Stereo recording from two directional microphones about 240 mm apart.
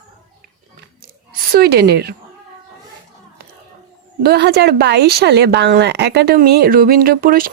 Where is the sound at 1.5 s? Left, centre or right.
Right.